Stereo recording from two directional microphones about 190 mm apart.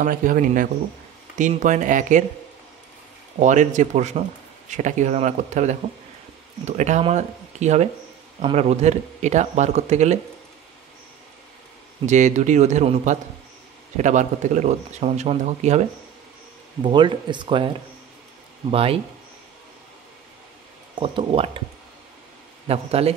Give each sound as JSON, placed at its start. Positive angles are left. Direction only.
{"t": 0.0, "sound": "speech", "side_deg": -45}
{"t": 3.3, "sound": "speech", "side_deg": -40}
{"t": 12.1, "sound": "speech", "side_deg": -40}
{"t": 16.8, "sound": "speech", "side_deg": -25}
{"t": 18.7, "sound": "speech", "side_deg": -30}
{"t": 20.9, "sound": "speech", "side_deg": -25}
{"t": 22.7, "sound": "speech", "side_deg": -30}